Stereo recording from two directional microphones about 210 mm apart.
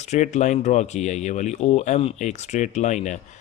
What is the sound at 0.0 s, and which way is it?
Speech, 35° left (ahead or behind).